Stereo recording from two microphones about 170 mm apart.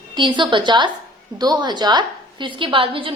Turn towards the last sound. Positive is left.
turn(degrees=-30)  # may be behind; listen again after turning